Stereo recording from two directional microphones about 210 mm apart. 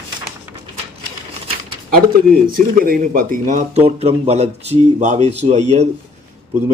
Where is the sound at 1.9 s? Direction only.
45° right (ahead or behind).